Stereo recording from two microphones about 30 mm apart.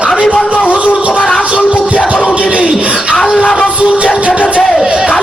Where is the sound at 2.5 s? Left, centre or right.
Right.